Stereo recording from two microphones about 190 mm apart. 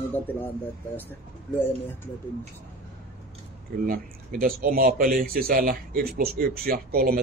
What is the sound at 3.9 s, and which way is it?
Speech, 50° right (ahead or behind).